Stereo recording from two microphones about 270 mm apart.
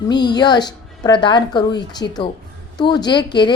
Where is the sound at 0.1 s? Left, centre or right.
Centre.